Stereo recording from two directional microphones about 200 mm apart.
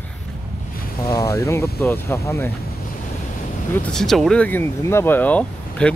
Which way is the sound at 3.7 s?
5° left (ahead or behind).